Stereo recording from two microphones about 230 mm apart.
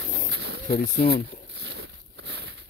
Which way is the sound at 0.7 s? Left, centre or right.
Left.